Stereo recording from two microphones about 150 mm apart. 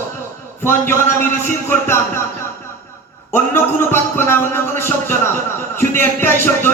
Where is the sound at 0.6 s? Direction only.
15° left (ahead or behind).